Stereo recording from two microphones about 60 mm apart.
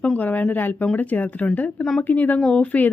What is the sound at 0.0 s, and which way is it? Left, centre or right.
Speech, left.